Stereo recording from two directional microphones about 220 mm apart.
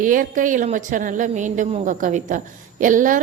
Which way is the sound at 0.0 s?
35° right (ahead or behind).